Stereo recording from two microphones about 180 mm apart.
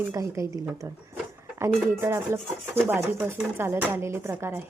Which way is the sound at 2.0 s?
15° right (ahead or behind).